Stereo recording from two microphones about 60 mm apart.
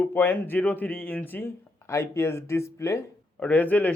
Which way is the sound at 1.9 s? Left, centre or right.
Left.